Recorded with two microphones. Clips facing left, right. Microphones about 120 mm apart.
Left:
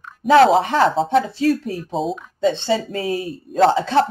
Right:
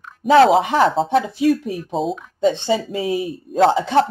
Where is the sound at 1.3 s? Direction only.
15° right (ahead or behind).